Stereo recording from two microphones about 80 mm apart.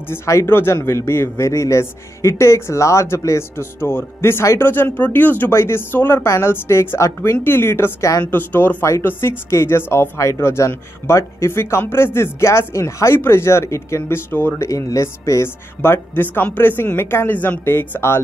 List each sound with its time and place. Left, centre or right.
0.1 s speech: left
8.3 s speech: left
10.1 s speech: left
14.6 s speech: left